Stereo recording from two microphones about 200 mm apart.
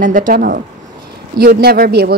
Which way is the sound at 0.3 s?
45° right (ahead or behind).